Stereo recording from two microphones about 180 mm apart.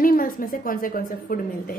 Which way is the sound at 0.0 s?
50° left (ahead or behind).